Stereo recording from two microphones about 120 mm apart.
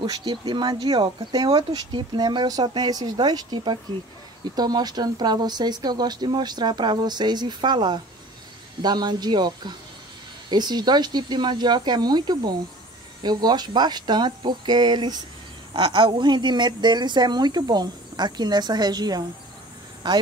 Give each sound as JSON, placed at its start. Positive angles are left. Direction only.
{"t": 0.0, "sound": "speech", "side_deg": -40}